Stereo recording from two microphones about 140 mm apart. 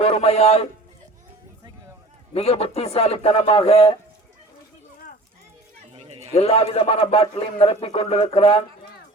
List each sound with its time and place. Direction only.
0.0 s speech: 45° left (ahead or behind)
2.3 s speech: 45° left (ahead or behind)
5.9 s chatter: 50° right (ahead or behind)
6.3 s speech: 45° left (ahead or behind)